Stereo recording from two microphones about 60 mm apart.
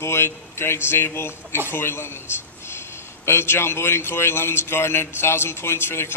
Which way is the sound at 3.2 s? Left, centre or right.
Left.